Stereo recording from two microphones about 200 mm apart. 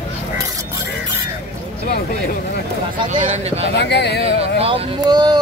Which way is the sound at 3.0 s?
30° right (ahead or behind).